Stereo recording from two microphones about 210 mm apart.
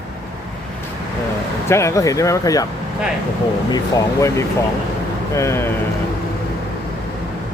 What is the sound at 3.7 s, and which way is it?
Speech, 15° left (ahead or behind).